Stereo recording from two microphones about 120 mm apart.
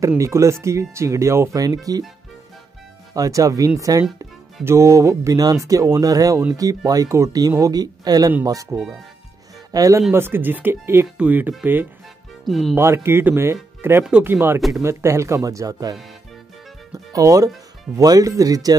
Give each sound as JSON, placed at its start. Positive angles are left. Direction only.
{"t": 0.2, "sound": "speech", "side_deg": -25}
{"t": 3.2, "sound": "speech", "side_deg": -30}
{"t": 9.7, "sound": "speech", "side_deg": -30}
{"t": 12.4, "sound": "speech", "side_deg": 0}
{"t": 12.7, "sound": "speech", "side_deg": -20}
{"t": 17.1, "sound": "speech", "side_deg": -30}